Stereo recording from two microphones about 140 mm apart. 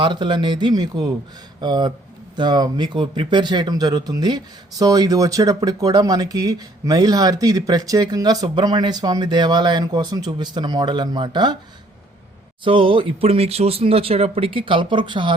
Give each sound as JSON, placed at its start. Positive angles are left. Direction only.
{"t": 0.0, "sound": "speech", "side_deg": -35}
{"t": 12.6, "sound": "speech", "side_deg": -35}